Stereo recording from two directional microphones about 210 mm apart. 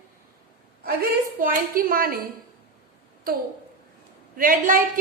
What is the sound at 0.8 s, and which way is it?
A woman's voice, 45° right (ahead or behind).